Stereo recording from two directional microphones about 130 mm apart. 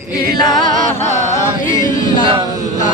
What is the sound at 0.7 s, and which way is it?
Music, 85° right.